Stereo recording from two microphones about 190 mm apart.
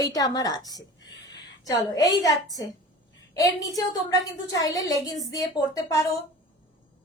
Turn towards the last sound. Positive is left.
turn(degrees=20)  # may be behind; listen again after turning